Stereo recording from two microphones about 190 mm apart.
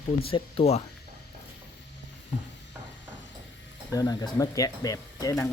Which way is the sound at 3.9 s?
20° left (ahead or behind).